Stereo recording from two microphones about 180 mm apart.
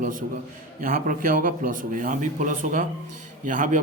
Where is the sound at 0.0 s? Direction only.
50° right (ahead or behind).